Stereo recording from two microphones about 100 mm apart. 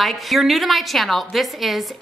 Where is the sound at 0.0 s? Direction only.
Centre (ahead or behind).